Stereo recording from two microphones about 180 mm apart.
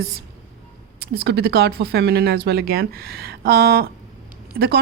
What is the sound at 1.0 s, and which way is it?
A woman's voice, 65° right (ahead or behind).